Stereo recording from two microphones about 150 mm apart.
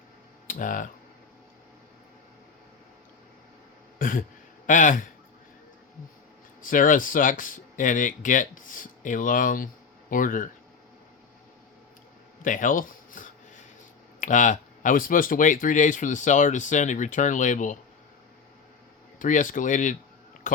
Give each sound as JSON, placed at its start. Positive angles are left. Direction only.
{"t": 0.4, "sound": "speech", "side_deg": 65}
{"t": 3.9, "sound": "a sound", "side_deg": 65}
{"t": 4.6, "sound": "speech", "side_deg": 60}
{"t": 6.6, "sound": "speech", "side_deg": 65}
{"t": 12.4, "sound": "speech", "side_deg": 65}
{"t": 19.2, "sound": "speech", "side_deg": 60}